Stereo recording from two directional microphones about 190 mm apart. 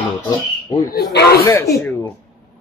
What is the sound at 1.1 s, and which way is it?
Speech, 60° left (ahead or behind).